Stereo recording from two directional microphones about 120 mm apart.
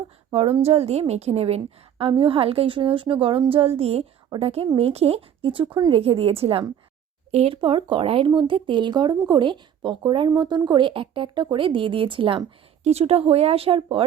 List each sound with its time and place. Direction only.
0.3 s a woman's voice: 50° right (ahead or behind)
5.9 s a woman's voice: 55° right (ahead or behind)
12.8 s speech: 60° right (ahead or behind)